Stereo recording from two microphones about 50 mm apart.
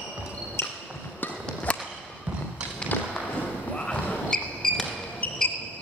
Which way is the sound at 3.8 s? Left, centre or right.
Left.